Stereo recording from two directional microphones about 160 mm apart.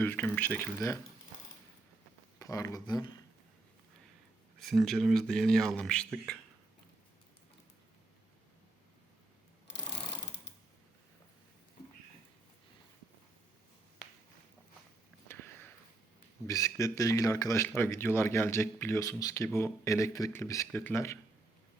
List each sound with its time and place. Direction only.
0.0 s speech: 10° left (ahead or behind)
2.4 s speech: 20° left (ahead or behind)
4.6 s speech: centre (ahead or behind)
9.6 s sewing machine: 90° left
15.3 s sniff: 15° left (ahead or behind)
16.5 s speech: 20° left (ahead or behind)